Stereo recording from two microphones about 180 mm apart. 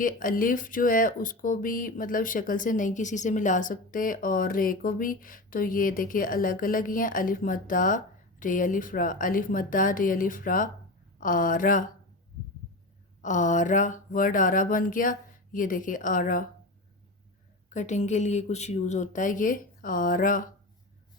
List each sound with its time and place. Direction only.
0.0 s speech: 50° left (ahead or behind)
13.2 s speech: 45° left (ahead or behind)
17.7 s speech: 40° left (ahead or behind)